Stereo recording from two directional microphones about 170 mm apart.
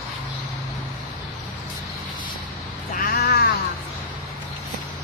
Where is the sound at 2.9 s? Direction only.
60° left (ahead or behind).